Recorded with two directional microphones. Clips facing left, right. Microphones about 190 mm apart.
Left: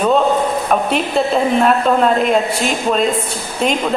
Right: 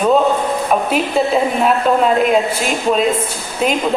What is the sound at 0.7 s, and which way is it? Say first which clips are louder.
A woman's voice: right 2 dB; 5° right (ahead or behind).